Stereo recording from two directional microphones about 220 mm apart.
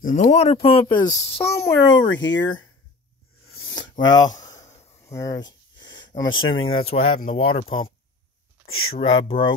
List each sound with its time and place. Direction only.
0.0 s speech: 35° left (ahead or behind)
1.4 s speech: 10° left (ahead or behind)
2.0 s speech: 55° left (ahead or behind)
4.0 s a sound: 20° left (ahead or behind)
6.6 s speech: 65° left (ahead or behind)
6.9 s speech: 25° left (ahead or behind)
8.6 s speech: 70° left (ahead or behind)
8.9 s speech: 25° left (ahead or behind)